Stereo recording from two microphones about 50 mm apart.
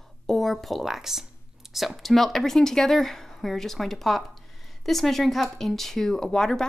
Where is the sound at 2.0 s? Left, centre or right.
Centre.